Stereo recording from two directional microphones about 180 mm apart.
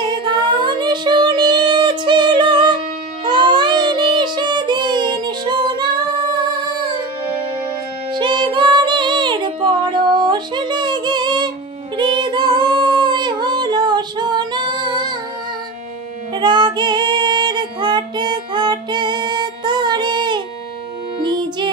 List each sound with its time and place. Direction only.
0.0 s child singing: 25° right (ahead or behind)
8.1 s music: 25° right (ahead or behind)
12.0 s singing: 25° right (ahead or behind)
16.3 s female singing: 25° right (ahead or behind)
21.2 s music: 25° right (ahead or behind)